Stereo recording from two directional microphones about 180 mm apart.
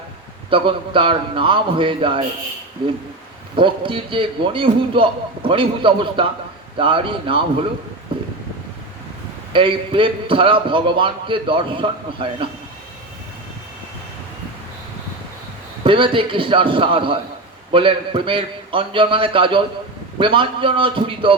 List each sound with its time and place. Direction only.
0.5 s a man's voice: 30° right (ahead or behind)
3.5 s a man's voice: 30° right (ahead or behind)
9.5 s a man's voice: 30° right (ahead or behind)
15.8 s a man's voice: 30° right (ahead or behind)